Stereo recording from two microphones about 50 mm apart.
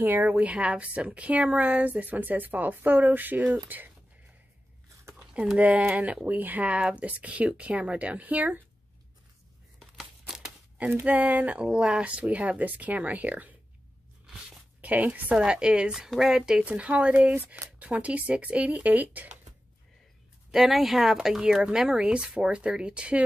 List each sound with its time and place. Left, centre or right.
0.0 s a woman's voice: right
6.2 s a woman's voice: right
9.9 s crumpling: centre
11.1 s speech: right
11.6 s speech: centre; by 13.6 s right
14.8 s a woman's voice: right
15.3 s speech: centre
16.6 s a woman's voice: right
20.5 s speech: centre; by 23.2 s right